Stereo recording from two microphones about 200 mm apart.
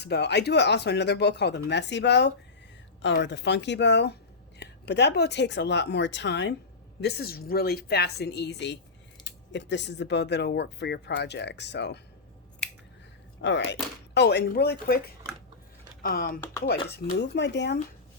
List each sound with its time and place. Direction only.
0.0 s speech: 55° left (ahead or behind)
13.4 s speech: 65° left (ahead or behind); by 16.4 s 45° left (ahead or behind)
16.9 s speech: 60° left (ahead or behind)